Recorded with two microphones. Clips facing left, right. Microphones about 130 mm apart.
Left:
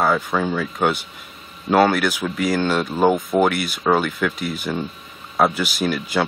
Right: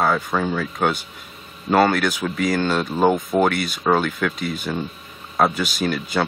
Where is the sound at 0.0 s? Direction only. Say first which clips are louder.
Left 1 dB; centre (ahead or behind).